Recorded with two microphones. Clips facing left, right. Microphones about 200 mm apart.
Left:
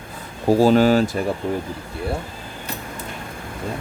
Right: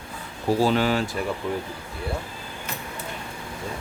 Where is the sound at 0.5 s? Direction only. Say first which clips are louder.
Left 7 dB; 40° left (ahead or behind).